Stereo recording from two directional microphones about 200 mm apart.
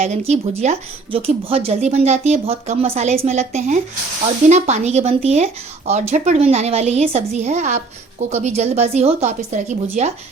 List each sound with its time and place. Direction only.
0.0 s speech: 35° right (ahead or behind)